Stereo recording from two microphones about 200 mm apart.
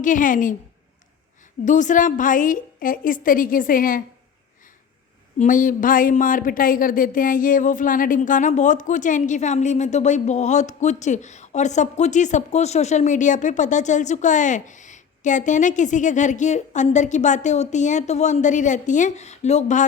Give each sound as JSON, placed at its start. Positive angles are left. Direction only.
{"t": 0.0, "sound": "a woman's voice", "side_deg": 40}
{"t": 1.6, "sound": "a woman's voice", "side_deg": 40}
{"t": 5.4, "sound": "a woman's voice", "side_deg": 40}